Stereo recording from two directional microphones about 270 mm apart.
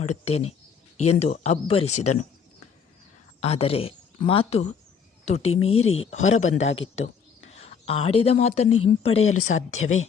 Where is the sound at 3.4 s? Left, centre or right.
Left.